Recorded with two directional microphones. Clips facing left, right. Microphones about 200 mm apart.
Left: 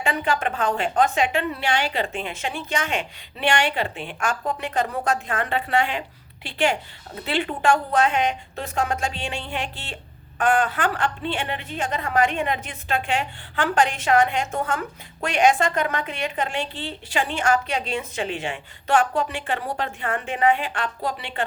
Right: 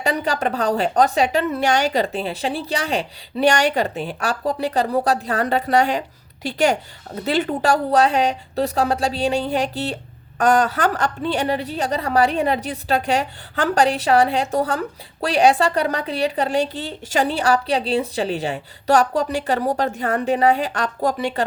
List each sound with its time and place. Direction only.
0.0 s a woman's voice: 40° right (ahead or behind)